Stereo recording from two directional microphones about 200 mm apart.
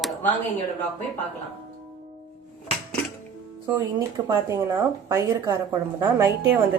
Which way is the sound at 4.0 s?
15° right (ahead or behind).